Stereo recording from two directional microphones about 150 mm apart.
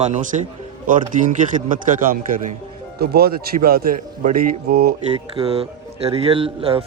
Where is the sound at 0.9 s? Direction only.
60° right (ahead or behind).